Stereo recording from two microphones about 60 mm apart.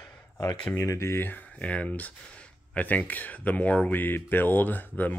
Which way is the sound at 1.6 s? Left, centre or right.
Left.